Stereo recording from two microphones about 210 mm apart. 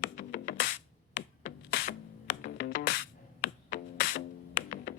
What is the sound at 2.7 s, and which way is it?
Music, 60° left (ahead or behind).